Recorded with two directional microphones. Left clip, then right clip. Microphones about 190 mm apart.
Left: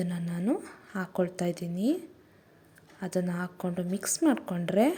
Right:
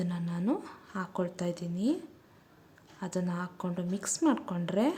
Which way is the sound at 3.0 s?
10° left (ahead or behind).